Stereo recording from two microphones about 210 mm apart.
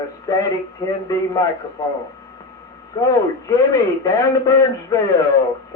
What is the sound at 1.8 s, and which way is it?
Speech, 15° left (ahead or behind).